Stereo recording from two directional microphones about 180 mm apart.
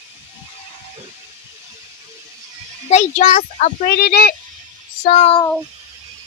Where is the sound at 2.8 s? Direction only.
40° left (ahead or behind).